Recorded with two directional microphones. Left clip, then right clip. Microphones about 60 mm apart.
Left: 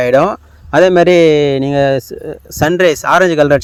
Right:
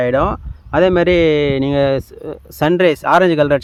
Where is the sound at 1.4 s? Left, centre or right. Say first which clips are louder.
Left 3 dB; centre.